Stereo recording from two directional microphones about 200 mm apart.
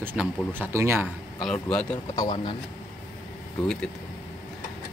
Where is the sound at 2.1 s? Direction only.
20° left (ahead or behind).